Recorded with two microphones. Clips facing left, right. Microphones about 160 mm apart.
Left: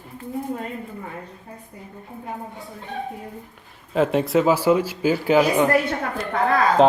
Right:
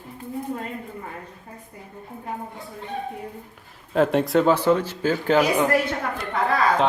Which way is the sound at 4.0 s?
Centre (ahead or behind).